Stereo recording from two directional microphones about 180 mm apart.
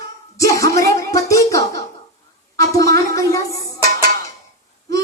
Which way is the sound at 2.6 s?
20° left (ahead or behind).